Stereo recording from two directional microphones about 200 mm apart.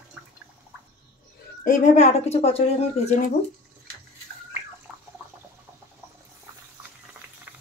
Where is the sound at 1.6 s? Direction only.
40° left (ahead or behind).